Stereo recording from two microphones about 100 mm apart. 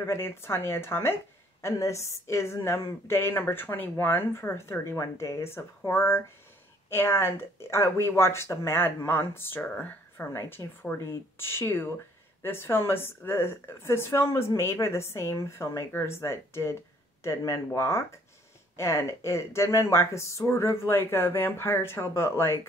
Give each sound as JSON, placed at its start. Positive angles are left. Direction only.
{"t": 0.0, "sound": "a woman's voice", "side_deg": 25}